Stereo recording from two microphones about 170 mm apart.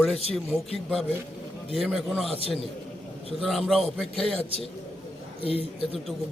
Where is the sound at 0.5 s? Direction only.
10° right (ahead or behind).